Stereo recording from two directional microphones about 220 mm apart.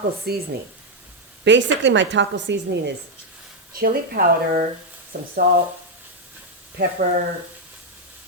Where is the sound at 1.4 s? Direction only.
55° right (ahead or behind).